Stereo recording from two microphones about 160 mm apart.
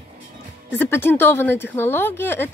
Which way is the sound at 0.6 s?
15° left (ahead or behind).